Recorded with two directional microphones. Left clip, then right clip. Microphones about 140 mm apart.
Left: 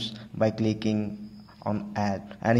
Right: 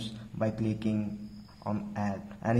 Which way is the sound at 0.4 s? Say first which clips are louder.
Left 7 dB; 30° left (ahead or behind).